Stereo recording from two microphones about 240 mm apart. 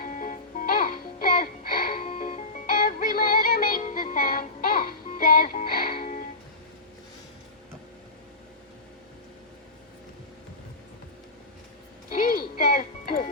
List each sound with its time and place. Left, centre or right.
0.0 s music: left
12.1 s music: left